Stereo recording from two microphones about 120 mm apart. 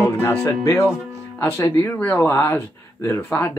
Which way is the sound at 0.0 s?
20° left (ahead or behind).